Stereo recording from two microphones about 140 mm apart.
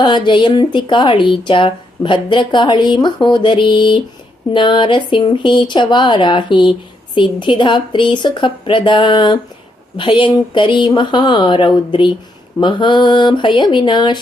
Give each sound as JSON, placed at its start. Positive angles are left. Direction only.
{"t": 0.0, "sound": "speech", "side_deg": 35}